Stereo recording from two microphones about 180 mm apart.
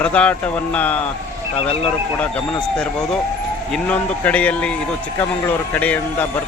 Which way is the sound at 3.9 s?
10° left (ahead or behind).